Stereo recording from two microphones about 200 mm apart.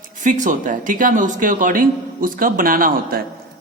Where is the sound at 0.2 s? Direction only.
40° right (ahead or behind).